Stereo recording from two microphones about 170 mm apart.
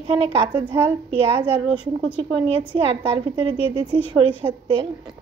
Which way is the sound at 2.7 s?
30° right (ahead or behind).